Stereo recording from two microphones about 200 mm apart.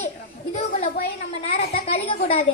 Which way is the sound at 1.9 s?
30° left (ahead or behind).